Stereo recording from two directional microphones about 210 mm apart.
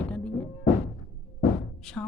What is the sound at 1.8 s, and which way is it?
Speech, 5° left (ahead or behind).